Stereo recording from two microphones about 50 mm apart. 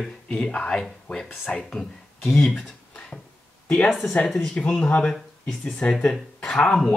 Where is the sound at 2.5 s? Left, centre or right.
Left.